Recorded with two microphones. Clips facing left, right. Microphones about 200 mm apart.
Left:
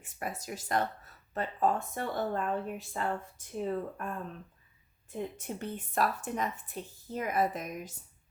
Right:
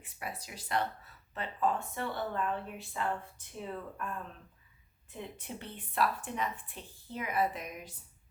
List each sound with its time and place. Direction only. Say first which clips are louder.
0.0 s speech: left 4 dB; 45° left (ahead or behind)
5.1 s speech: left 6 dB; 45° left (ahead or behind)